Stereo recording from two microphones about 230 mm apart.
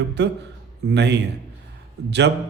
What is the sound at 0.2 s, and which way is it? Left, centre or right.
A man's voice, right.